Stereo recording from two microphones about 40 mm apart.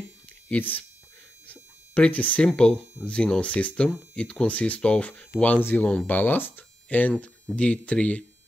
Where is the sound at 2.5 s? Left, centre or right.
Left.